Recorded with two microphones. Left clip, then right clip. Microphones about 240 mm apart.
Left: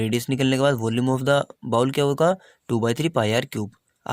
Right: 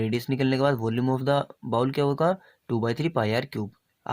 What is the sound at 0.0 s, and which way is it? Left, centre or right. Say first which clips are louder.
Speech: left 3 dB; left.